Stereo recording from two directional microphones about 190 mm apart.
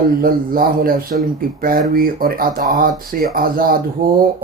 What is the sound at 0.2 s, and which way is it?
Speech, 50° right (ahead or behind).